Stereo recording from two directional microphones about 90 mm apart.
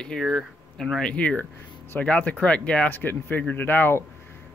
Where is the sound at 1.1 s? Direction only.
15° left (ahead or behind).